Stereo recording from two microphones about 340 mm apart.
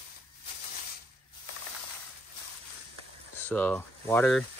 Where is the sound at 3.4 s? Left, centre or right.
Centre.